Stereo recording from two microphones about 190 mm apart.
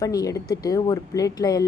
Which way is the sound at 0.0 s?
20° left (ahead or behind).